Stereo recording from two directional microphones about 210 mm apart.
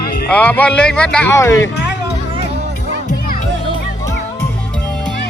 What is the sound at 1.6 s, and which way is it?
Speech, 55° left (ahead or behind).